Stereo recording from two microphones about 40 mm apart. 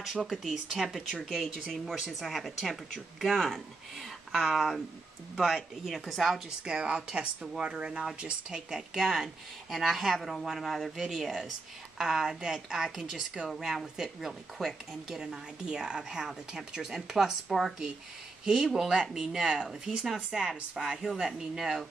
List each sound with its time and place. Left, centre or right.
0.0 s a woman's voice: centre
4.3 s a woman's voice: centre
6.6 s a woman's voice: right
8.7 s a woman's voice: centre
15.0 s a woman's voice: centre
18.4 s a woman's voice: centre